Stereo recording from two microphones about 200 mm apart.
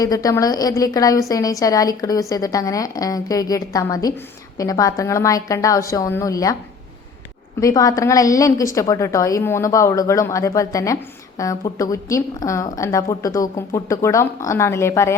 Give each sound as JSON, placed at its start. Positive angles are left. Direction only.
{"t": 0.0, "sound": "a woman's voice", "side_deg": 15}
{"t": 7.6, "sound": "a woman's voice", "side_deg": 15}